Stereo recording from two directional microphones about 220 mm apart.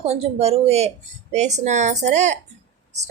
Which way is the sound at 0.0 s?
30° right (ahead or behind).